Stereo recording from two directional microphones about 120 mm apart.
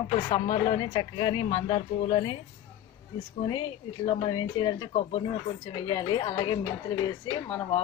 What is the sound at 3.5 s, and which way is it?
Speech, 45° left (ahead or behind).